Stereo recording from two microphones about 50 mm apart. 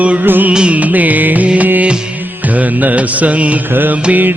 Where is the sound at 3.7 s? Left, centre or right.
Right.